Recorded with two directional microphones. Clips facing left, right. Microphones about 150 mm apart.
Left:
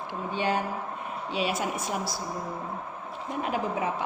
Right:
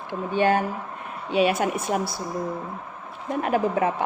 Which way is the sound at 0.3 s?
55° right (ahead or behind).